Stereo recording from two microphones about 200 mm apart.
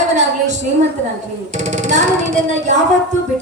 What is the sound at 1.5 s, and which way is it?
Speech, 35° right (ahead or behind).